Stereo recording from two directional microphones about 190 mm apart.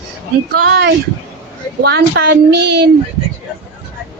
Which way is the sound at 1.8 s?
60° right (ahead or behind).